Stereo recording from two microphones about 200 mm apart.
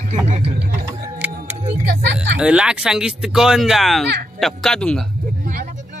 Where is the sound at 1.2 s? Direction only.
10° right (ahead or behind).